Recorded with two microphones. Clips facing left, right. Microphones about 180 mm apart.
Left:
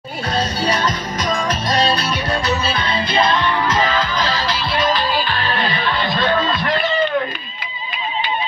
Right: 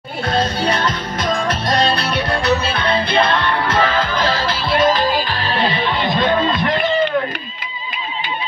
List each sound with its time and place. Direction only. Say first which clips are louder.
0.3 s music: right 2 dB; 55° right (ahead or behind); by 6.9 s 20° right (ahead or behind)